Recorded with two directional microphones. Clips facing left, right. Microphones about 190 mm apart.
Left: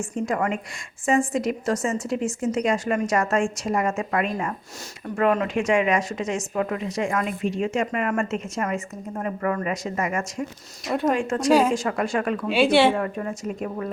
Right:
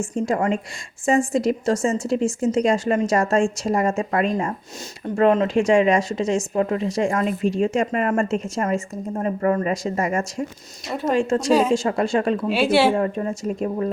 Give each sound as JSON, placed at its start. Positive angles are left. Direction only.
{"t": 0.0, "sound": "a woman's voice", "side_deg": -25}
{"t": 12.5, "sound": "a woman's voice", "side_deg": -5}
{"t": 13.0, "sound": "a woman's voice", "side_deg": -30}